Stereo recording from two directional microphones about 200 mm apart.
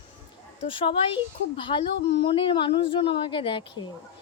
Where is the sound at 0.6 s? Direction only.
25° left (ahead or behind).